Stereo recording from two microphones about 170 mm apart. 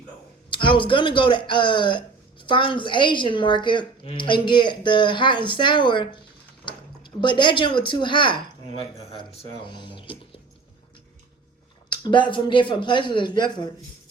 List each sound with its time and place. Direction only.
0.5 s speech: 30° left (ahead or behind)
11.9 s speech: 25° left (ahead or behind)